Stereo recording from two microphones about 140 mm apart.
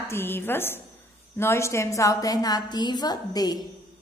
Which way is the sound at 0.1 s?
15° left (ahead or behind).